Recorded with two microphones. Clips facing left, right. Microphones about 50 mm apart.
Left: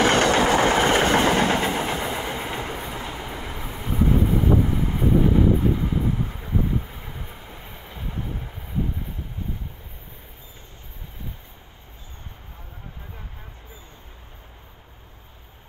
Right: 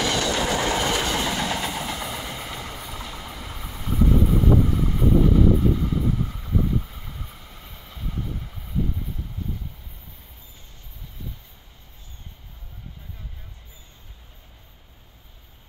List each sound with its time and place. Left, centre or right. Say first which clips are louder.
0.0 s train: left 6 dB; left